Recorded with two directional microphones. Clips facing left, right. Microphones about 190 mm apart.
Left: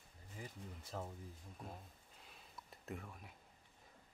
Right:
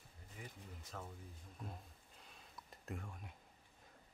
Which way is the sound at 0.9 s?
25° left (ahead or behind).